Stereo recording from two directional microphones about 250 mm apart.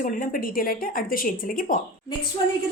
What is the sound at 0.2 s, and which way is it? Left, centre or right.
A woman's voice, left.